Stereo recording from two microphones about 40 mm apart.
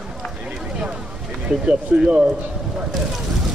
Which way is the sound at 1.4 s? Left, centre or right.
Right.